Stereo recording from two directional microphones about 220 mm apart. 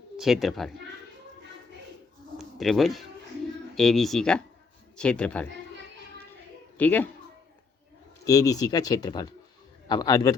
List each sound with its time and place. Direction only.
0.2 s speech: centre (ahead or behind)
2.4 s speech: centre (ahead or behind)
6.7 s speech: 10° left (ahead or behind)
8.2 s speech: 15° left (ahead or behind)